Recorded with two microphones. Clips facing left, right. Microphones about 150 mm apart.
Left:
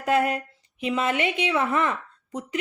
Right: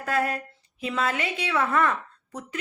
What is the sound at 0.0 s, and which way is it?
A woman's voice, 20° left (ahead or behind).